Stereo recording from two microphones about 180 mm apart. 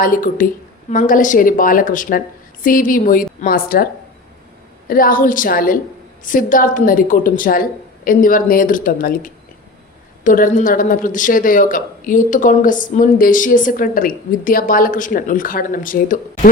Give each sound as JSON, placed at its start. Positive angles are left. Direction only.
{"t": 0.0, "sound": "a woman's voice", "side_deg": 50}
{"t": 4.9, "sound": "a woman's voice", "side_deg": 50}